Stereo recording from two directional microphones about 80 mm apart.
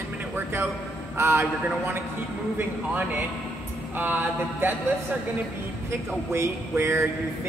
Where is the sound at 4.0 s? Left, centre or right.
Right.